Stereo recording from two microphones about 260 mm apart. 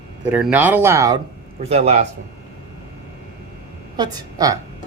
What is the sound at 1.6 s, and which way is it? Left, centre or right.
Speech, right.